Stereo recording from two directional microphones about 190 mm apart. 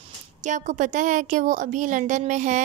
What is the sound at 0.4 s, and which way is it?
Speech, 40° right (ahead or behind).